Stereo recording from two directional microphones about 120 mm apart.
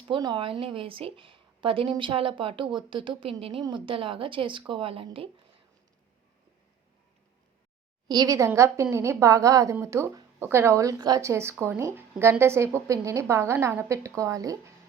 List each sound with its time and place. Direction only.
0.1 s a woman's voice: 40° right (ahead or behind)
8.0 s a woman's voice: 35° right (ahead or behind)